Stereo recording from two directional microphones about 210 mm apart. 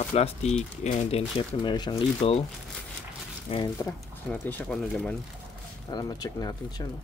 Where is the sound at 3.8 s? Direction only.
10° left (ahead or behind).